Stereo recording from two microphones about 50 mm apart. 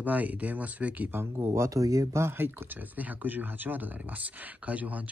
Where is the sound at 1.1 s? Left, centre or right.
Right.